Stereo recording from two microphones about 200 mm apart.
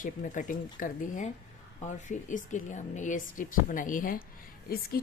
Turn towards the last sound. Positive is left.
turn(degrees=50)  # may be behind; listen again after turning